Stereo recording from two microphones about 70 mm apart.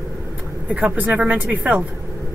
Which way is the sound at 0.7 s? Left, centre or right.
Centre.